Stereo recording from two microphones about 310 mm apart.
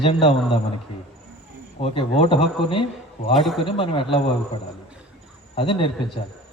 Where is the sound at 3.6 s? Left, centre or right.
Centre.